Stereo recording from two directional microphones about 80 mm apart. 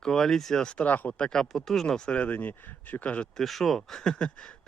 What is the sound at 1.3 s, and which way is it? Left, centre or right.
Speech, centre.